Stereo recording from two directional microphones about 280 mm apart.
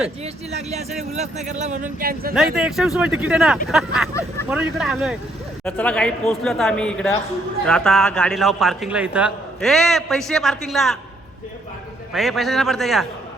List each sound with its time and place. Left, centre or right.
0.5 s speech: right
2.3 s a man's voice: centre
12.1 s a man's voice: centre